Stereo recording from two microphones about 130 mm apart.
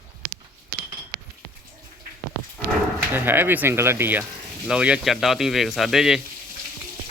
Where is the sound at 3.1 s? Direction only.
15° right (ahead or behind).